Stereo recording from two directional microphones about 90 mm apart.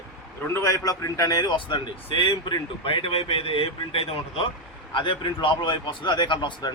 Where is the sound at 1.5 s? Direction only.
65° left (ahead or behind); by 4.5 s 85° left.